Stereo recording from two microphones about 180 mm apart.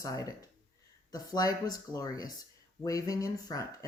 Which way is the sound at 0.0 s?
20° left (ahead or behind).